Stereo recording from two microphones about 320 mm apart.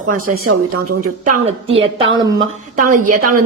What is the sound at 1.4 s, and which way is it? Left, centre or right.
Speech, centre.